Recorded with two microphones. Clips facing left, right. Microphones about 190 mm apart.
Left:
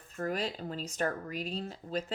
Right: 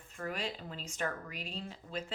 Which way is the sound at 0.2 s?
40° left (ahead or behind).